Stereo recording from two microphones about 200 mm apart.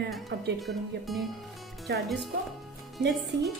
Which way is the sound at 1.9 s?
60° right (ahead or behind).